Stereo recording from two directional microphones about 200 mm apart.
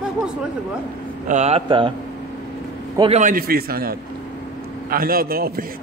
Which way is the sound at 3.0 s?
30° right (ahead or behind).